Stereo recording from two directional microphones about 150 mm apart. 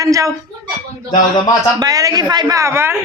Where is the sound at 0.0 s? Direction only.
25° right (ahead or behind).